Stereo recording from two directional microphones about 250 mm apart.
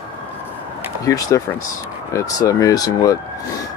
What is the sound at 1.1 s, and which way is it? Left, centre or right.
Speech, centre.